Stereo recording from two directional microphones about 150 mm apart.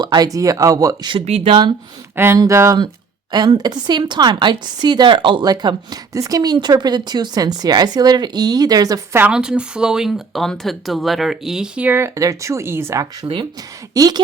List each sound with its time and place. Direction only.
0.0 s speech: 25° right (ahead or behind)
1.2 s speech: 40° right (ahead or behind)
2.1 s speech: 15° right (ahead or behind)
9.1 s speech: 10° right (ahead or behind)
13.2 s speech: 30° right (ahead or behind)